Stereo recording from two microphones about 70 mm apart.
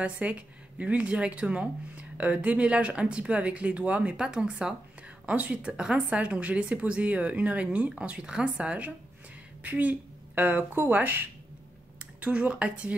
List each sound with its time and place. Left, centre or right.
0.0 s speech: centre